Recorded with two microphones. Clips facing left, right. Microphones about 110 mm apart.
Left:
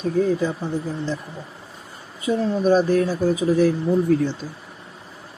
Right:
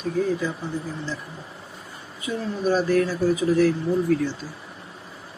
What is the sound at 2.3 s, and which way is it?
Speech, 30° left (ahead or behind).